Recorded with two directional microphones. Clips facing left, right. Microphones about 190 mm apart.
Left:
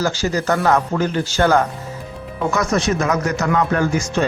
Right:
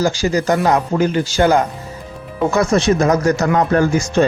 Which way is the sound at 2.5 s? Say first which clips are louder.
Right 4 dB; 30° right (ahead or behind).